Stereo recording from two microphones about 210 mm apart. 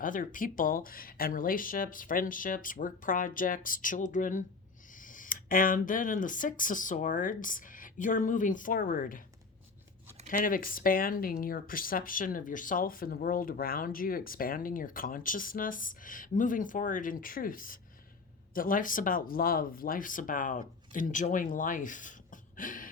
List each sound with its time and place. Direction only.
0.0 s speech: 40° left (ahead or behind)
10.2 s speech: 40° left (ahead or behind)